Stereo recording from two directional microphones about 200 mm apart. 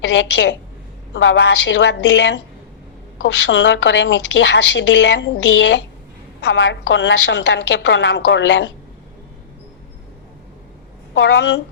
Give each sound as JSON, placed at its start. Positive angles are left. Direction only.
{"t": 0.0, "sound": "a woman's voice", "side_deg": 65}
{"t": 3.4, "sound": "a woman's voice", "side_deg": 65}
{"t": 11.1, "sound": "a woman's voice", "side_deg": 60}